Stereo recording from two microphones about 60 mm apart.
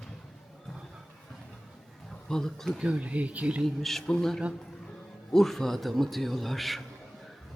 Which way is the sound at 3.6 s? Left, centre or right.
Centre.